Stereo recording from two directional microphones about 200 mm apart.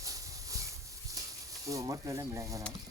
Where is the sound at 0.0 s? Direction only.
15° right (ahead or behind).